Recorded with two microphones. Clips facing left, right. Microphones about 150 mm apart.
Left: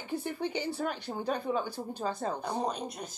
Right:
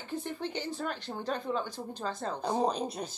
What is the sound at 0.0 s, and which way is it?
Speech, 10° left (ahead or behind).